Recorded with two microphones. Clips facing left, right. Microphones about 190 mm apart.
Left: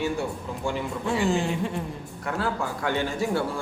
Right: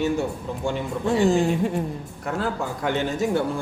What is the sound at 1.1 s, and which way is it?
Speech, 40° right (ahead or behind).